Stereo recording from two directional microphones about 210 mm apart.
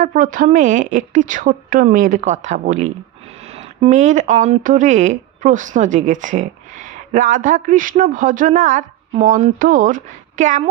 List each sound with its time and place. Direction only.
0.0 s a woman's voice: 40° right (ahead or behind)